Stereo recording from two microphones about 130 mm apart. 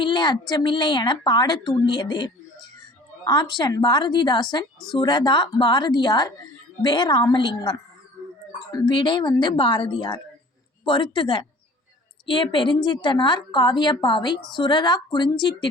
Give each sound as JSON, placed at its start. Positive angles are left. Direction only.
{"t": 0.0, "sound": "a woman's voice", "side_deg": 35}